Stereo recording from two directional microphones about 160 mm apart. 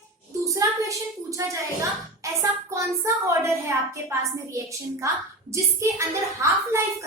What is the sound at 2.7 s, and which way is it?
A woman's voice, 20° right (ahead or behind).